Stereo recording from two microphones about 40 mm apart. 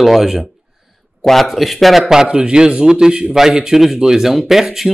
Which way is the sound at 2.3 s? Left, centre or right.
Right.